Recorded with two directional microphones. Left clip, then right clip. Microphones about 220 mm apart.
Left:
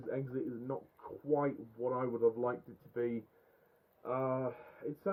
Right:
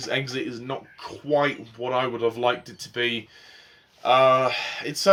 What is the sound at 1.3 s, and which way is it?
Speech, 10° right (ahead or behind).